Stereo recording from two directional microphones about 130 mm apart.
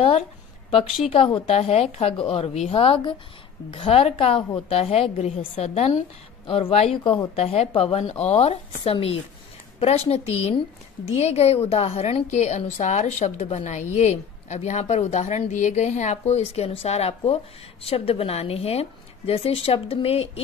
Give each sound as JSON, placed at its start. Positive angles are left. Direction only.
{"t": 0.7, "sound": "a woman's voice", "side_deg": 45}